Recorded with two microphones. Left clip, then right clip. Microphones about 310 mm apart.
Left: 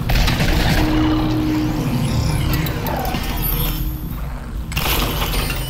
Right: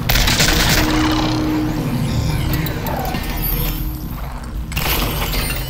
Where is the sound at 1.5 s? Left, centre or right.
Centre.